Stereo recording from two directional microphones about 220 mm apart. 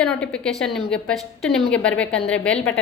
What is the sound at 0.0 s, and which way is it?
A woman's voice, 5° left (ahead or behind).